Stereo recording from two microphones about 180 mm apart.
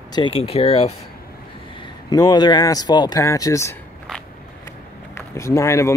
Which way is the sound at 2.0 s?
20° left (ahead or behind).